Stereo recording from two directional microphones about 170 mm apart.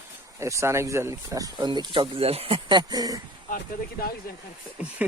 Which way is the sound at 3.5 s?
60° left (ahead or behind).